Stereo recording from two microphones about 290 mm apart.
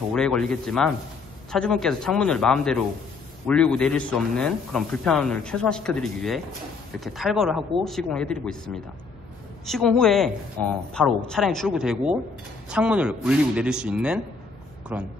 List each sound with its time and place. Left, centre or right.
0.1 s speech: centre